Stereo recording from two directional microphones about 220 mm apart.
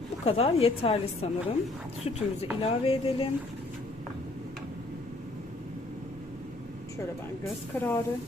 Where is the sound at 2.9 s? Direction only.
25° left (ahead or behind).